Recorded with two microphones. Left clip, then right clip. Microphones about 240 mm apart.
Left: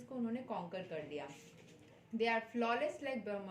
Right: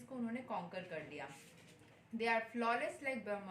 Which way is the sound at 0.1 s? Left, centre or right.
Centre.